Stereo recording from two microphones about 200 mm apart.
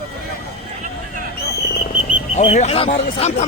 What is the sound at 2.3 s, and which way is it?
Speech, 35° left (ahead or behind).